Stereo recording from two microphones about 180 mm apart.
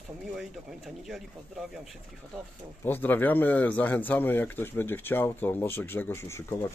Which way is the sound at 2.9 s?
10° left (ahead or behind).